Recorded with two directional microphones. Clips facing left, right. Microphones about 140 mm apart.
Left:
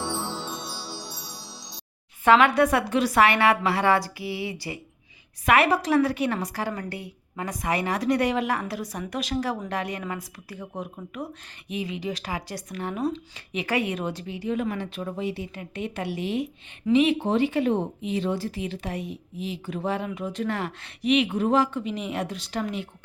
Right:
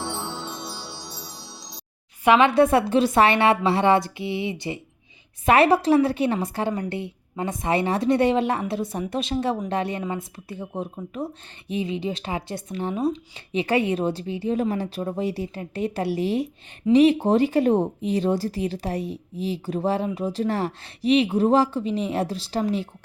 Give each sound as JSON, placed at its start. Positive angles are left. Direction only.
{"t": 2.2, "sound": "a woman's voice", "side_deg": -20}